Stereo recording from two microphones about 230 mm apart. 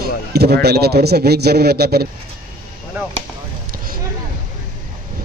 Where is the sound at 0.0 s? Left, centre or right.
Right.